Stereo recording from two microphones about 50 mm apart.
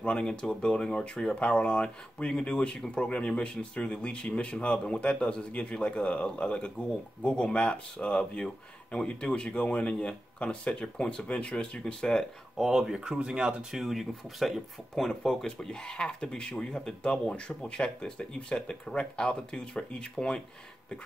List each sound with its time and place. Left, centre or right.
0.0 s speech: centre
12.5 s speech: centre
15.0 s speech: centre